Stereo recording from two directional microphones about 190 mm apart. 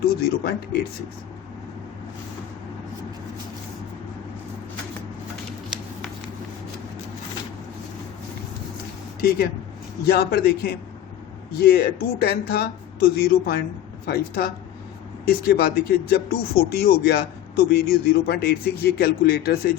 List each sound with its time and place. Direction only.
0.1 s speech: 55° left (ahead or behind)
10.0 s speech: 55° left (ahead or behind)